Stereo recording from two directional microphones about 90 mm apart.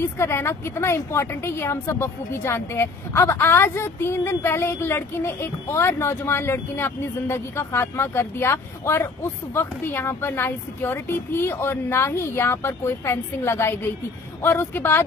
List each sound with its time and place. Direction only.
0.0 s a woman's voice: 30° left (ahead or behind)